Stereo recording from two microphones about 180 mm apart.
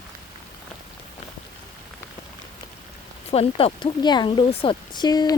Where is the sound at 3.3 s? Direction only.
35° left (ahead or behind).